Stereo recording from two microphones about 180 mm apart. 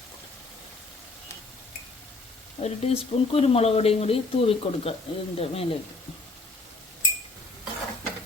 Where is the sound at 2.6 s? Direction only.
35° left (ahead or behind).